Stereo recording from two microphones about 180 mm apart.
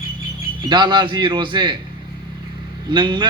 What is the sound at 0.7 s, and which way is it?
Speech, 25° right (ahead or behind).